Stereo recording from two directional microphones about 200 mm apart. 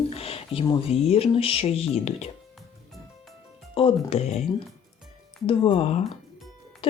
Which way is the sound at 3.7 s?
30° left (ahead or behind).